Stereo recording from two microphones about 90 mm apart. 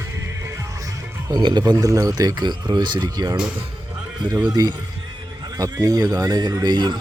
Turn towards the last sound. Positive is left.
turn(degrees=-55)  # may be behind; listen again after turning